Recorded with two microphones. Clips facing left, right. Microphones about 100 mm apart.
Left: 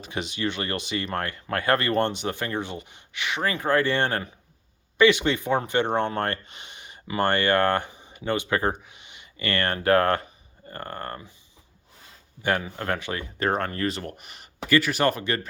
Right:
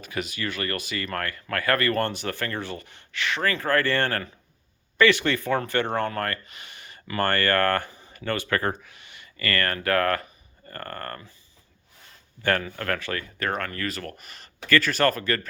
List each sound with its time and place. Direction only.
0.0 s speech: 25° left (ahead or behind)
12.4 s speech: 15° left (ahead or behind)